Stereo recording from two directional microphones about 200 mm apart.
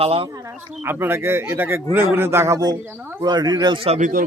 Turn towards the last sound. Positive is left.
turn(degrees=-30)  # may be behind; listen again after turning